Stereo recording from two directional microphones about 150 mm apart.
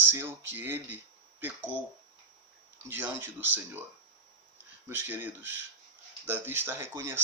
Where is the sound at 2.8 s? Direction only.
15° right (ahead or behind).